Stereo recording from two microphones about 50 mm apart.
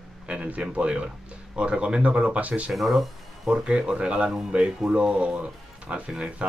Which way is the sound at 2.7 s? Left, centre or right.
Centre.